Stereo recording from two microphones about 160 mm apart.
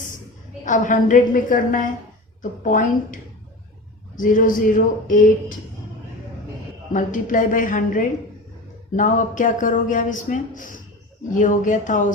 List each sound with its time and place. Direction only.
0.6 s a man's voice: 55° left (ahead or behind)
4.2 s a man's voice: 55° left (ahead or behind)
6.9 s a man's voice: 55° left (ahead or behind)